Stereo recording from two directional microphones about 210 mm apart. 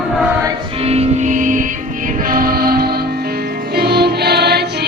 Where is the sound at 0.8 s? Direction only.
30° right (ahead or behind).